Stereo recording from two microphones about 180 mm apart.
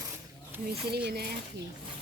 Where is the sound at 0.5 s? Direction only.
10° right (ahead or behind).